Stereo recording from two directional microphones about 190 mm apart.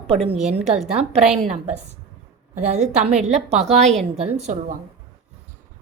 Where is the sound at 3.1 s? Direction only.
Centre (ahead or behind).